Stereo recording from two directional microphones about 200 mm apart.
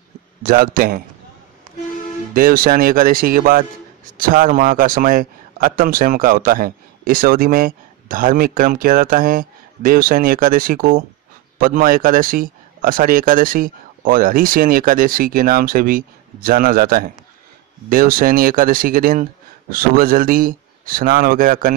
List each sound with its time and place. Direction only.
0.4 s a man's voice: 45° right (ahead or behind)
2.3 s a man's voice: 45° right (ahead or behind)